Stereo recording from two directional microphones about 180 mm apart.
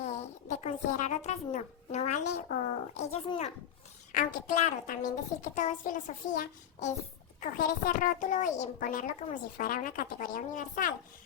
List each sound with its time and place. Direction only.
0.0 s a sound: 40° left (ahead or behind)
2.5 s a child's voice: 40° left (ahead or behind)
4.1 s a child's voice: 50° left (ahead or behind)